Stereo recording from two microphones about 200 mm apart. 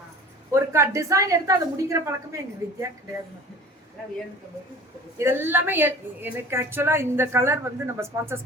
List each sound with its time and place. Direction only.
0.5 s a woman's voice: 15° right (ahead or behind)
5.1 s a woman's voice: 10° right (ahead or behind)